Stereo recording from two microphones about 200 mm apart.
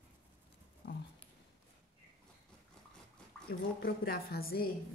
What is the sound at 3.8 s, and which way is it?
Speech, 50° left (ahead or behind).